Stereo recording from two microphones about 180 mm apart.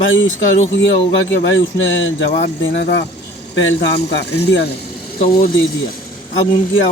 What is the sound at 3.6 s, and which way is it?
Speech, 80° left.